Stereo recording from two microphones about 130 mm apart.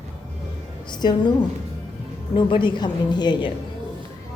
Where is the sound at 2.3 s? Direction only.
40° left (ahead or behind).